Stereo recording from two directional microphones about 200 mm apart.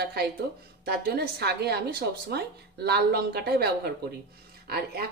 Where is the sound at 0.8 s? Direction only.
50° right (ahead or behind).